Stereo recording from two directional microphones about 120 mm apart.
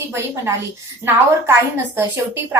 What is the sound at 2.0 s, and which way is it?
Speech, 20° right (ahead or behind).